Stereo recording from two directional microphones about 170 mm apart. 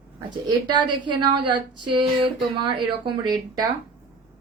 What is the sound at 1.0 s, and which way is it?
A woman's voice, 30° right (ahead or behind).